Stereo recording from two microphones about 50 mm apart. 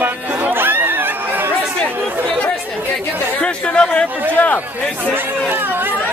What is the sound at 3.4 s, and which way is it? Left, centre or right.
Speech, left.